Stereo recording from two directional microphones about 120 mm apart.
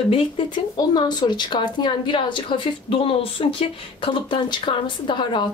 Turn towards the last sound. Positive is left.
turn(degrees=40)  # may be behind; listen again after turning